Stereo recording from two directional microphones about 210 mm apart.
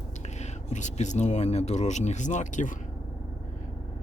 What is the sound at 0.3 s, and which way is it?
Speech, 35° left (ahead or behind).